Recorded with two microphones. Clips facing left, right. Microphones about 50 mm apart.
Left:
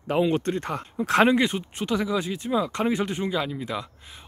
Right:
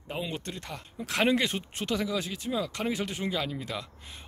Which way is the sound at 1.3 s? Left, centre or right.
Left.